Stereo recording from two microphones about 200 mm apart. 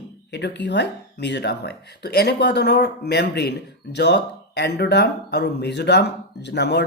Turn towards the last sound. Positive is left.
turn(degrees=55)  # may be behind; listen again after turning